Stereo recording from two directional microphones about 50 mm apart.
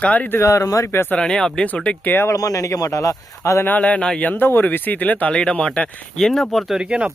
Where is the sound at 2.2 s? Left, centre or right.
Left.